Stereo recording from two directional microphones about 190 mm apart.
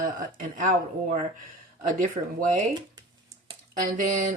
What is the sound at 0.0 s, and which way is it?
Speech, 45° right (ahead or behind).